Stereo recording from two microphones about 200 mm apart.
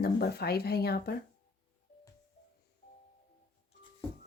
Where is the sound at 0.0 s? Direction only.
50° left (ahead or behind).